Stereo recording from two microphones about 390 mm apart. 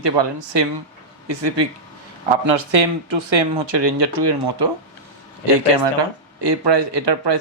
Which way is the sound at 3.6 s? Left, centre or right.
Right.